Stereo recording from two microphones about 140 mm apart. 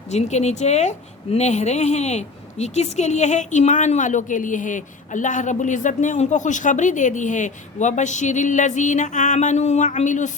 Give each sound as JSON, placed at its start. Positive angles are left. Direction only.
{"t": 0.1, "sound": "a woman's voice", "side_deg": 55}